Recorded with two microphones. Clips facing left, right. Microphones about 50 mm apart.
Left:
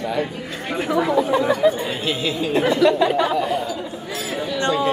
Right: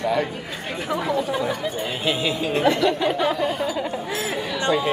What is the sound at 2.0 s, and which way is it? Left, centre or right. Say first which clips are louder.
Speech: right 1 dB; centre.